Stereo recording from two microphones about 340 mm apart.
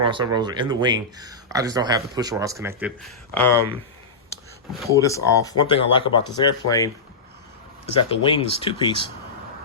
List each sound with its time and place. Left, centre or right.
0.0 s speech: centre
3.3 s speech: centre
4.8 s speech: centre
8.4 s speech: centre